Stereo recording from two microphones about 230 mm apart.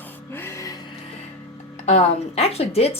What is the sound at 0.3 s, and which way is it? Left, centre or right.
Music, centre.